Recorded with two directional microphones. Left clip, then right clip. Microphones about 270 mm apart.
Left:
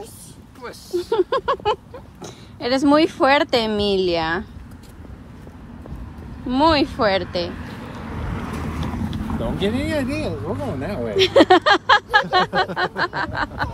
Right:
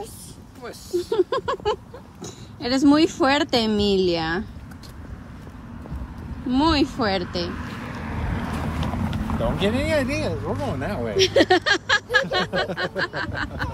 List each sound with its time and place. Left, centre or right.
0.9 s speech: centre
6.4 s speech: centre
7.8 s vehicle: right
9.2 s speech: centre
10.3 s speech: centre
11.1 s speech: centre